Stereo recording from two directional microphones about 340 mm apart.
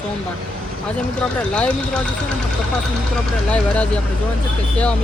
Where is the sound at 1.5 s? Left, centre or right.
Centre.